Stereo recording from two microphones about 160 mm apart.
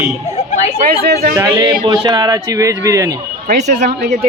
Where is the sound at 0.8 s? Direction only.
75° right (ahead or behind).